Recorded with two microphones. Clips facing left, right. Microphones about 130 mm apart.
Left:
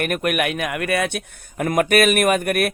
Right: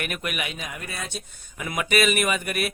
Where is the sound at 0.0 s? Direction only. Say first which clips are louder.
Left 10 dB; 50° left (ahead or behind).